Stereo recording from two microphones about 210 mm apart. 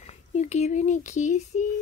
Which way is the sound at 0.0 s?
35° left (ahead or behind).